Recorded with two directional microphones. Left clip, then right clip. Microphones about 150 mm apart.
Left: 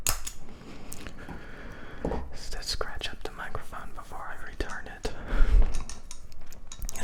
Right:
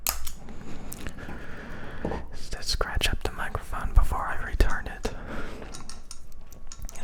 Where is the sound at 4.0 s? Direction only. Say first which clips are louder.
Right 12 dB; 30° right (ahead or behind).